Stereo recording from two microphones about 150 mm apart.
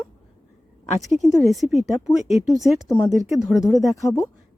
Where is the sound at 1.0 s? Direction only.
Centre (ahead or behind).